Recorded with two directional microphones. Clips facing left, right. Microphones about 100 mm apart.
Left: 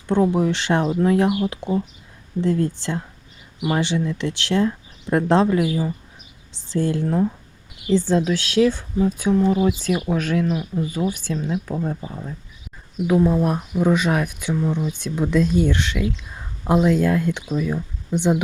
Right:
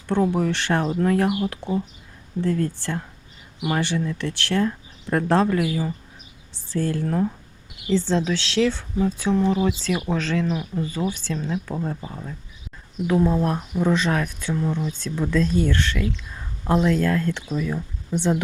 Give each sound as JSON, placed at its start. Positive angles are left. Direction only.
{"t": 0.1, "sound": "speech", "side_deg": 15}